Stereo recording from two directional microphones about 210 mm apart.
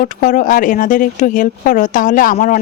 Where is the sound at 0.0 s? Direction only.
40° left (ahead or behind).